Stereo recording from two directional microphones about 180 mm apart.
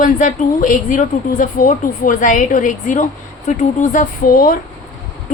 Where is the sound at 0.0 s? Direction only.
45° left (ahead or behind).